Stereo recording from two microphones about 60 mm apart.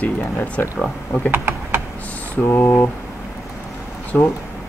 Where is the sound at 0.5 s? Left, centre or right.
Centre.